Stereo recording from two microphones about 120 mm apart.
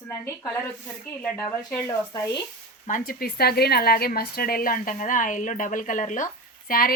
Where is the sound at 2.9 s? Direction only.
90° left.